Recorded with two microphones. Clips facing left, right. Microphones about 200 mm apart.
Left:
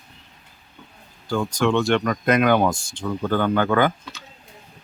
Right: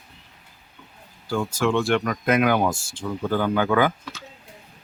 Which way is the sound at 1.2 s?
5° right (ahead or behind).